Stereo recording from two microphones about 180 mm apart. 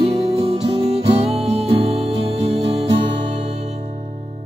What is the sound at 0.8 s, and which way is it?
Music, 35° right (ahead or behind).